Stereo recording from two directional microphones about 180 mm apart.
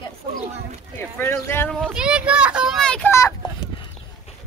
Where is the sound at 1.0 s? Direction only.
10° left (ahead or behind).